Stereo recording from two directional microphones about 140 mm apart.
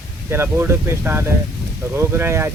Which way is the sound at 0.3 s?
15° right (ahead or behind).